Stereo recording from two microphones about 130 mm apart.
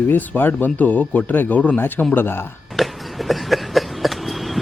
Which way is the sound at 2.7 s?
Centre (ahead or behind).